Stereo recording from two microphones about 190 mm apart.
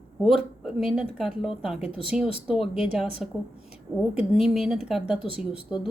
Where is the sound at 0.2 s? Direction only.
Centre (ahead or behind).